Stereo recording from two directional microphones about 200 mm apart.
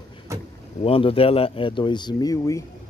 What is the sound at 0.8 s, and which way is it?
Speech, 30° left (ahead or behind).